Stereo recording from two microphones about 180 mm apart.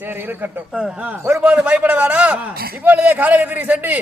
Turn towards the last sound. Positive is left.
turn(degrees=-10)  # may be behind; listen again after turning